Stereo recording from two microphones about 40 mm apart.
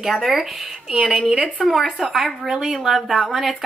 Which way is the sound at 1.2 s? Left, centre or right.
Right.